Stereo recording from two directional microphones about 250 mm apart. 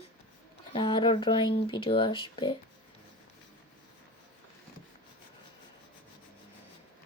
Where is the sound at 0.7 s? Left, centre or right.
Centre.